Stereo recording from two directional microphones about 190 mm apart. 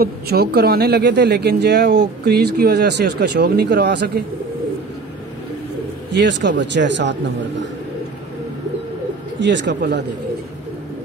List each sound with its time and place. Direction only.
0.0 s speech: 55° right (ahead or behind)
6.1 s a man's voice: 65° right (ahead or behind)
9.4 s a man's voice: 70° right (ahead or behind)